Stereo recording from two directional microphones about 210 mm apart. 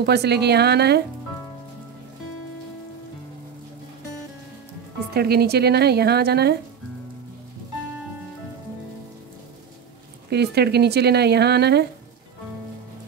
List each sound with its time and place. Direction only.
0.0 s speech: 50° right (ahead or behind)
5.1 s speech: 50° right (ahead or behind)
10.3 s speech: 50° right (ahead or behind)